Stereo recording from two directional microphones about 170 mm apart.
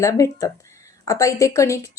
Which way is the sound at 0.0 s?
20° left (ahead or behind).